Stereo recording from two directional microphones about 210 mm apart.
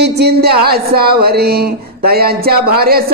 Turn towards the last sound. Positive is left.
turn(degrees=-45)  # may be behind; listen again after turning